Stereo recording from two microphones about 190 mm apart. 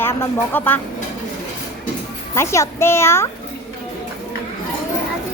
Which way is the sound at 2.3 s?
15° left (ahead or behind).